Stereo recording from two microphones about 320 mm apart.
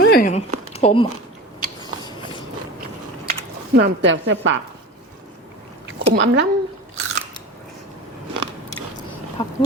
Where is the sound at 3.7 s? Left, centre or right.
Right.